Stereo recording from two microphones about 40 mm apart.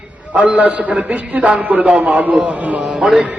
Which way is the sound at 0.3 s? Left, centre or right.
Right.